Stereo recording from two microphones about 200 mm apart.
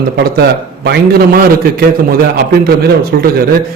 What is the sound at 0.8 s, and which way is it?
Speech, 50° right (ahead or behind).